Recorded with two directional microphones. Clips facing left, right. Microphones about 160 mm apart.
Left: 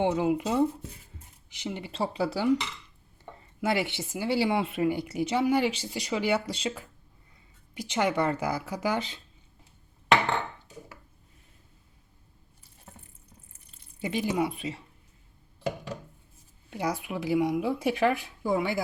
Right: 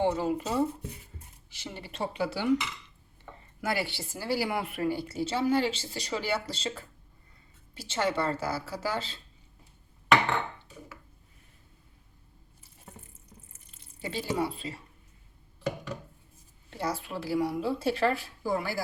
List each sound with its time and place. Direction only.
0.0 s speech: 20° left (ahead or behind)
1.9 s speech: 30° left (ahead or behind)
3.6 s speech: 25° left (ahead or behind)
14.0 s speech: 15° left (ahead or behind)
16.6 s speech: 15° left (ahead or behind)